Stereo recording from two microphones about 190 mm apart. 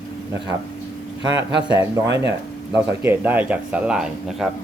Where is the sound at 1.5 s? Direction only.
25° left (ahead or behind).